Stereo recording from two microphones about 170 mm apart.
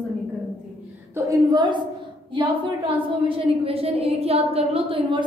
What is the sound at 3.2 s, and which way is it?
A woman's voice, 35° right (ahead or behind).